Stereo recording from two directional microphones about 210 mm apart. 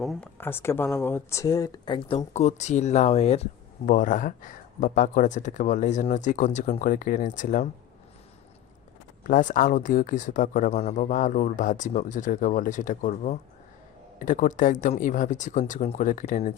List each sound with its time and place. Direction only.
0.0 s speech: centre (ahead or behind)
0.3 s speech: 10° left (ahead or behind); by 7.7 s 40° left (ahead or behind)
9.2 s speech: 40° left (ahead or behind)